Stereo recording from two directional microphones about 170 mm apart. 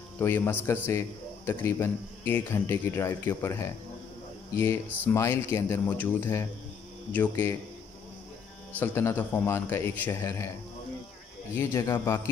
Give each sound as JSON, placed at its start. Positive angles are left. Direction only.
{"t": 0.2, "sound": "a man's voice", "side_deg": 10}
{"t": 8.7, "sound": "a man's voice", "side_deg": 15}
{"t": 11.5, "sound": "speech", "side_deg": 20}